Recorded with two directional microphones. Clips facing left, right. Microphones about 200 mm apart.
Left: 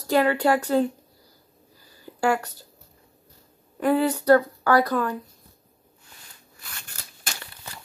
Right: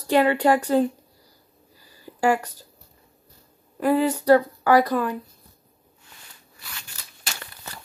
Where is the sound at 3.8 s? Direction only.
5° right (ahead or behind).